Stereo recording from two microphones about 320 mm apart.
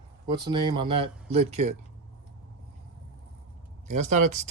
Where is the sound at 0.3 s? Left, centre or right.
Centre.